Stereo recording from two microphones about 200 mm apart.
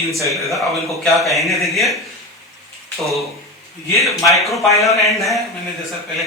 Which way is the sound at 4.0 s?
Centre (ahead or behind).